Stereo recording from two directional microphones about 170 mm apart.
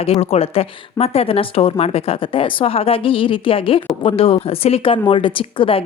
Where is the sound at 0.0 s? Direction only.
35° left (ahead or behind).